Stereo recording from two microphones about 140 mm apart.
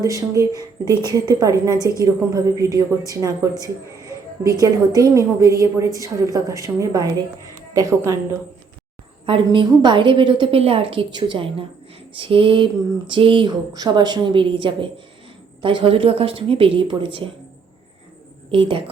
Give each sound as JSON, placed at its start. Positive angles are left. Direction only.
{"t": 0.0, "sound": "a woman's voice", "side_deg": -25}
{"t": 9.2, "sound": "speech", "side_deg": -40}
{"t": 18.5, "sound": "speech", "side_deg": -40}